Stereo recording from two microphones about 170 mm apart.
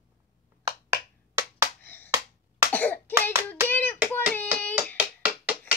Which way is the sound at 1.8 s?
10° left (ahead or behind).